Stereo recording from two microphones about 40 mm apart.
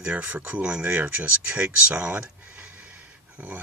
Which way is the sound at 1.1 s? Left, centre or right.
Right.